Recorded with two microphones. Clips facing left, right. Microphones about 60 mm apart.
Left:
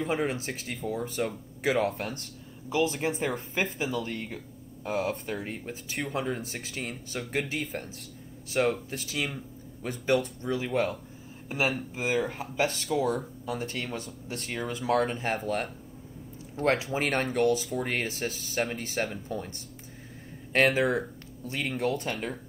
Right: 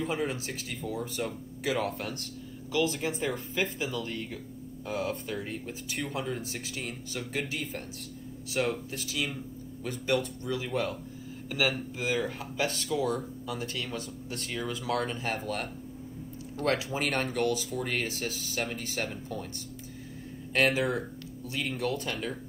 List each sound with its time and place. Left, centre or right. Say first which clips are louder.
0.0 s speech: left 2 dB; left
2.7 s speech: left 1 dB; left
3.0 s speech: left 2 dB; left
5.3 s speech: left 1 dB; left
10.4 s speech: left 3 dB; left
10.7 s speech: left 4 dB; left
12.0 s speech: left 2 dB; left
12.3 s speech: left 3 dB; left
12.8 s speech: left 2 dB; left
14.3 s speech: left 2 dB; left
14.6 s speech: left 5 dB; left
16.9 s speech: left 2 dB; left
20.5 s speech: left 3 dB; left
22.0 s speech: left 1 dB; left